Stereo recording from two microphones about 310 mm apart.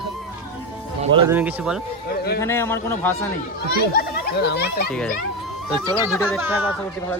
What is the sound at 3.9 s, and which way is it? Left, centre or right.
Speech, left.